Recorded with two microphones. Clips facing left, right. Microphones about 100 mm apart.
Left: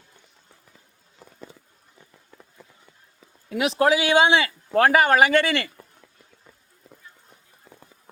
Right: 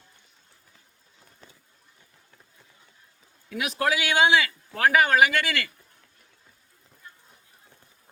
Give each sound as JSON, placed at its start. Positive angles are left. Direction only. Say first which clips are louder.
{"t": 3.6, "sound": "speech", "louder": "left 6 dB", "side_deg": 30}